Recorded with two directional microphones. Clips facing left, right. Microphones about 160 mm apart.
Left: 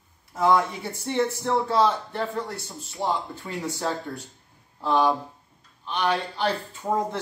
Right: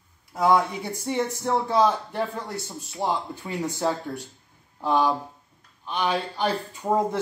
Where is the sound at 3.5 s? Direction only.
15° right (ahead or behind).